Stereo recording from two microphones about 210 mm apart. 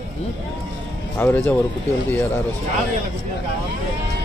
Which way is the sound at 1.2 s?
10° left (ahead or behind).